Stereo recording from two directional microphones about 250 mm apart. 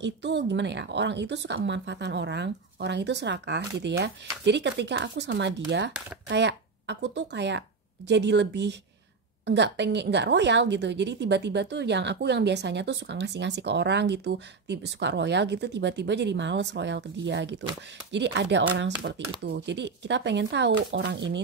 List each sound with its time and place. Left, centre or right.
0.0 s a woman's voice: right